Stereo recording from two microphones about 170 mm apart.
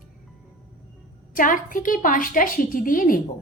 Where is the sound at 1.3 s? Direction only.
50° left (ahead or behind).